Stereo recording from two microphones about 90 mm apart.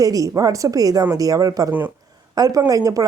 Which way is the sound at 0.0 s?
40° right (ahead or behind).